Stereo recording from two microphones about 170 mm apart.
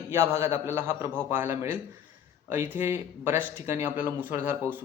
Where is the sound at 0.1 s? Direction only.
15° right (ahead or behind).